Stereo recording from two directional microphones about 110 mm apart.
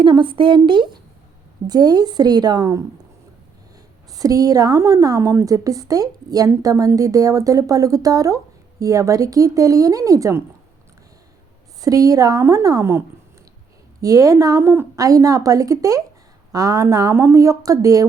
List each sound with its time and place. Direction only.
0.0 s a woman's voice: 45° right (ahead or behind)
4.1 s a woman's voice: 35° right (ahead or behind)
11.8 s a woman's voice: 30° right (ahead or behind)